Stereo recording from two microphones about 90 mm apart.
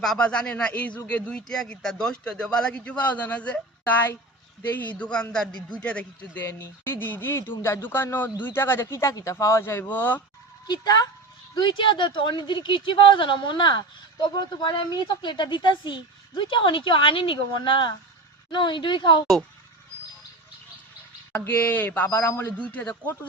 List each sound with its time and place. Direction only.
0.0 s speech: 5° left (ahead or behind)
6.3 s speech: 25° left (ahead or behind)
10.7 s speech: 45° left (ahead or behind)
11.5 s speech: 60° left (ahead or behind)
21.3 s speech: 25° left (ahead or behind)
22.5 s speech: 15° left (ahead or behind)